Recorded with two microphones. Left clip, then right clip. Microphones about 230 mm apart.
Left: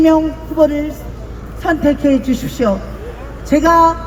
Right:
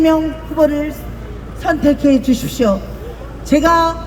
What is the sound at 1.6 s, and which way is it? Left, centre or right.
A man's voice, right.